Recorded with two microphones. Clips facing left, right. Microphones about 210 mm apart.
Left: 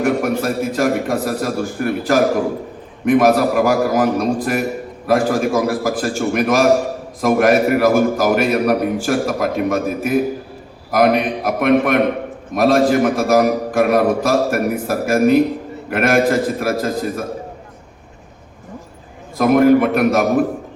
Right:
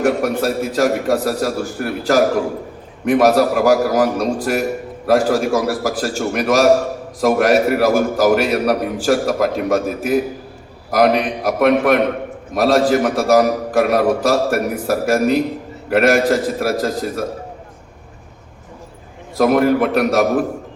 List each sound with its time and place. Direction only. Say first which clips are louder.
0.0 s a sound: right 1 dB; 55° left (ahead or behind)
3.1 s a man's voice: even; 50° left (ahead or behind)
19.4 s a man's voice: left 2 dB; 55° left (ahead or behind)